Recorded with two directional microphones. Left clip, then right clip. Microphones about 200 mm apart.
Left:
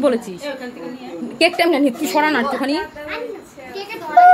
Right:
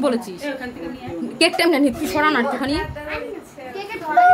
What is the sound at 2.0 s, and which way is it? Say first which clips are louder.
Speech: left 1 dB; 15° left (ahead or behind).